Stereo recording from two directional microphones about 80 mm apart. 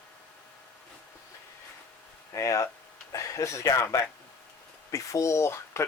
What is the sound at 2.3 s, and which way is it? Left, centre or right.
Speech, left.